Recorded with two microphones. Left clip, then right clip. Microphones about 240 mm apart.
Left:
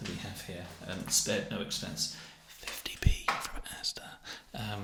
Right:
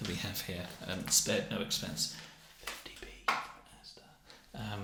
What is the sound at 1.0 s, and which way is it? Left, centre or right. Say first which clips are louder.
Speech: even; centre.